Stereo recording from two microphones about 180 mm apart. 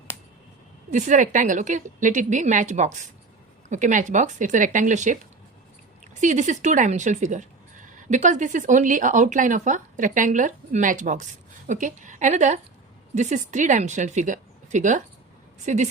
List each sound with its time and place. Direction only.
0.9 s a woman's voice: 45° right (ahead or behind)